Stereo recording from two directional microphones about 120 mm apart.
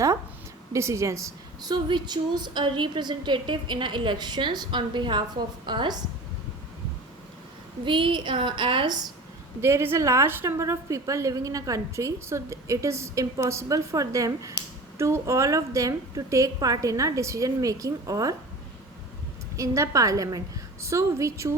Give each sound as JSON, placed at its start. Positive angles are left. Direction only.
{"t": 0.7, "sound": "a woman's voice", "side_deg": -25}
{"t": 1.7, "sound": "a woman's voice", "side_deg": -35}
{"t": 7.9, "sound": "a woman's voice", "side_deg": -45}
{"t": 9.6, "sound": "a woman's voice", "side_deg": -20}
{"t": 19.5, "sound": "a woman's voice", "side_deg": -25}